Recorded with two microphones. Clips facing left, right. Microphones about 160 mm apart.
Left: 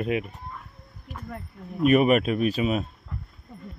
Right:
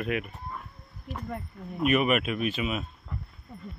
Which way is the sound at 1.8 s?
40° left (ahead or behind).